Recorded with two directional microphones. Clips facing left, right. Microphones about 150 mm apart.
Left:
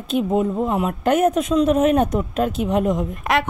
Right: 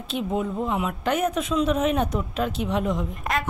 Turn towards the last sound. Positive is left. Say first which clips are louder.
# left 7 dB
turn(degrees=85)